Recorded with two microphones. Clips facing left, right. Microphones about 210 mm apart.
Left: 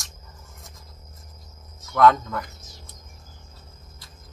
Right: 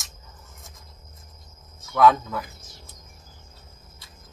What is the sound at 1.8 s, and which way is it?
Speech, 5° right (ahead or behind).